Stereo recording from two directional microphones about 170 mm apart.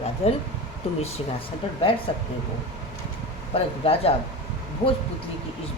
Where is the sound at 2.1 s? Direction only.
30° left (ahead or behind).